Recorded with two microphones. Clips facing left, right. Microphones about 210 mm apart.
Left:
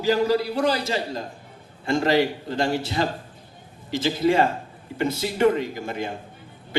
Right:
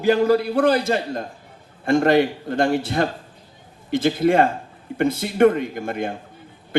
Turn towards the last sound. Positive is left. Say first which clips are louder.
# right 3 dB
turn(degrees=-55)  # may be behind; listen again after turning